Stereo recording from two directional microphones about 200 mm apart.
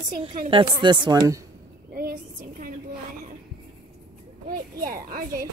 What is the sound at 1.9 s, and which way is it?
Speech, 45° right (ahead or behind).